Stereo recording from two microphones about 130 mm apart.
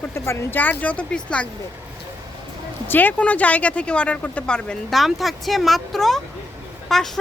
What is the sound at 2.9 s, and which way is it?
Speech, 15° left (ahead or behind).